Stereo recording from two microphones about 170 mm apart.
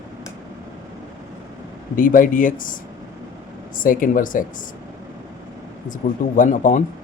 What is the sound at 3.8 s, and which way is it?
Speech, 55° left (ahead or behind).